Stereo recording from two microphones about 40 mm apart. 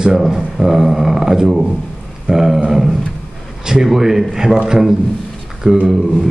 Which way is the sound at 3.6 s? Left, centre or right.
Centre.